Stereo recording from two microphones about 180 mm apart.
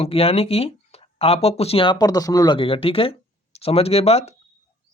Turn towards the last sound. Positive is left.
turn(degrees=35)  # may be behind; listen again after turning